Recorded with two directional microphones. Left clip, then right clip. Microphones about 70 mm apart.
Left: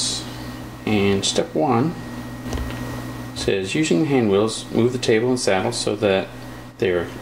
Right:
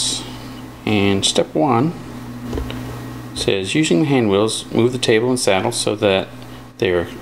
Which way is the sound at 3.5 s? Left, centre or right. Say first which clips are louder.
Right 3 dB; centre.